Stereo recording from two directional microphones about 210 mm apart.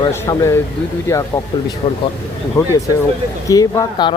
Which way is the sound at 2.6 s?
15° left (ahead or behind).